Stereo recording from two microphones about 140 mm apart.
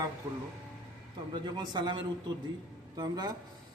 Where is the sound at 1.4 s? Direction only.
30° right (ahead or behind).